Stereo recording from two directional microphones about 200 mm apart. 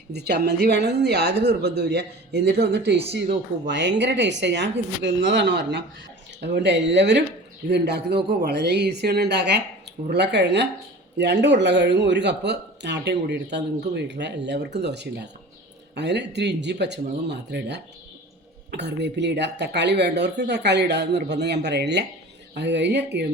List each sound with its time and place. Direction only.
0.1 s speech: 55° right (ahead or behind)